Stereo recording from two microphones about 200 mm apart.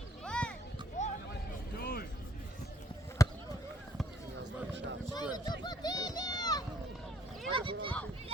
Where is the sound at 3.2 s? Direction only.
15° left (ahead or behind).